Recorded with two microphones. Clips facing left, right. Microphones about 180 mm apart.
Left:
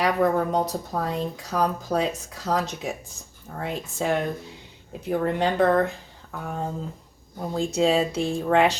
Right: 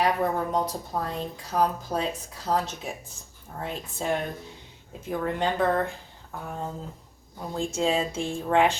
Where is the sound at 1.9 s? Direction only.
90° left.